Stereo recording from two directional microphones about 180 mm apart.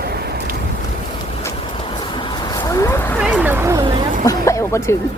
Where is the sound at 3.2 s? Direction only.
5° right (ahead or behind).